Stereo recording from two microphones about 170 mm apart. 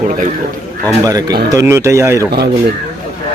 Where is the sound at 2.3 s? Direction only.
70° right (ahead or behind).